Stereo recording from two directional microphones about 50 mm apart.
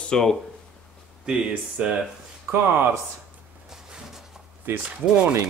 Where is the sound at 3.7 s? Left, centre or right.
Centre.